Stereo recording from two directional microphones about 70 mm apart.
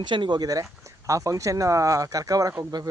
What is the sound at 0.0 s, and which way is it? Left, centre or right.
Speech, right.